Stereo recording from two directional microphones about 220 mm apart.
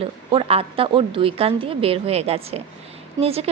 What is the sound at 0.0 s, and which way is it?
A woman's voice, 25° right (ahead or behind).